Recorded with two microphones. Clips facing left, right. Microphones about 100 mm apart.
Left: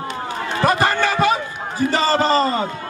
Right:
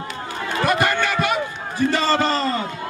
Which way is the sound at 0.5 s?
30° left (ahead or behind).